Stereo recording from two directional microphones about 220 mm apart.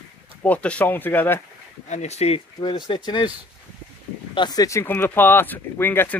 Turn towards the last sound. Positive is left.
turn(degrees=10)  # may be behind; listen again after turning